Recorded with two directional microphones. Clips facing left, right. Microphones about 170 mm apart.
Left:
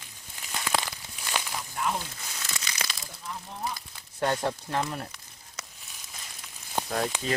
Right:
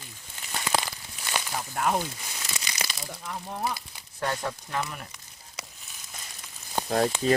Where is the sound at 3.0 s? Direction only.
65° right (ahead or behind).